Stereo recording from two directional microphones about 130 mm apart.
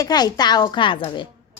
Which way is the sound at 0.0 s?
30° left (ahead or behind).